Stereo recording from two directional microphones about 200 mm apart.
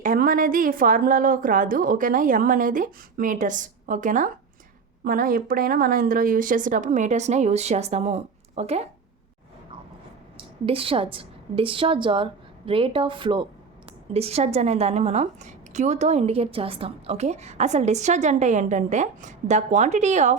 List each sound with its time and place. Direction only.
0.0 s a woman's voice: 45° right (ahead or behind)
10.3 s a woman's voice: 25° right (ahead or behind)